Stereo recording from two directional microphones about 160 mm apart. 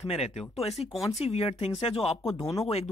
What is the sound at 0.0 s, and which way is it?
Speech, 40° left (ahead or behind).